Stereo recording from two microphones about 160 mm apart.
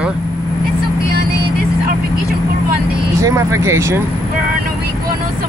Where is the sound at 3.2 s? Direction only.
15° right (ahead or behind).